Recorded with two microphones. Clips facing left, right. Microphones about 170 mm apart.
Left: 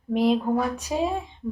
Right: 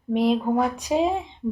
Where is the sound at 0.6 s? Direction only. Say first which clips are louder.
Right 3 dB; 15° right (ahead or behind).